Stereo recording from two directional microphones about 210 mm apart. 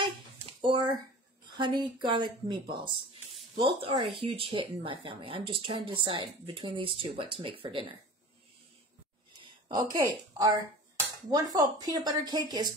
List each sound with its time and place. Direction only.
0.6 s speech: 20° right (ahead or behind)
9.4 s a sound: 20° right (ahead or behind)
9.9 s a woman's voice: 15° right (ahead or behind)